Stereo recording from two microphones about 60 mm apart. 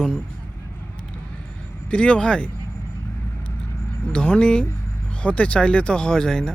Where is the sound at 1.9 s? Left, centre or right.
Centre.